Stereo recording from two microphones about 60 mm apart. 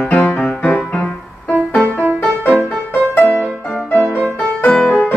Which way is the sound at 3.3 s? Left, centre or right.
Left.